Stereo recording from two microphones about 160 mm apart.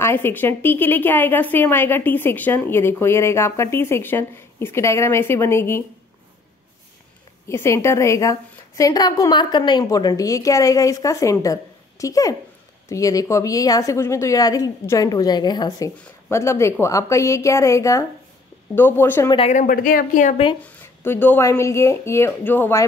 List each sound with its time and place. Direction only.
0.0 s a woman's voice: 15° left (ahead or behind)
7.4 s a woman's voice: 15° left (ahead or behind)
19.5 s speech: 55° left (ahead or behind)
20.6 s a woman's voice: 15° left (ahead or behind)